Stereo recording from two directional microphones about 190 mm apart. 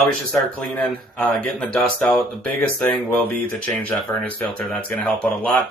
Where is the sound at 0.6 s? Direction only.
10° left (ahead or behind).